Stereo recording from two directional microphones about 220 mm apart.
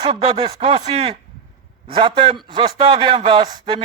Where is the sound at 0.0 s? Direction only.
25° right (ahead or behind).